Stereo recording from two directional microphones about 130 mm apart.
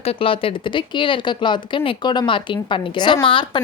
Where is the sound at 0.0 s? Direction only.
45° left (ahead or behind).